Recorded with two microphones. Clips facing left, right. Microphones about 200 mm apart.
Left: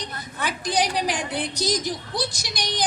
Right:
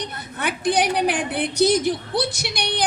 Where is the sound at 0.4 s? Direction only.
60° right (ahead or behind).